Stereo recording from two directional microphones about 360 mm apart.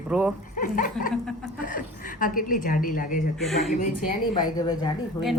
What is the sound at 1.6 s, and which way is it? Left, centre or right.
A woman's voice, left.